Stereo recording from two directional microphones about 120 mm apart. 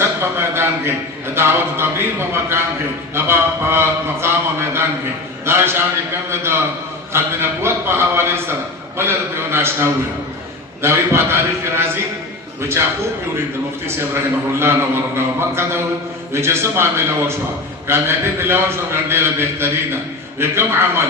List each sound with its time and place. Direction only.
0.0 s a sound: 20° right (ahead or behind)
1.4 s a man's voice: 20° right (ahead or behind)
14.6 s a man's voice: 20° right (ahead or behind)